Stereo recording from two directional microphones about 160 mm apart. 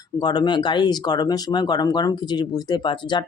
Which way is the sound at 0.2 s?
25° left (ahead or behind).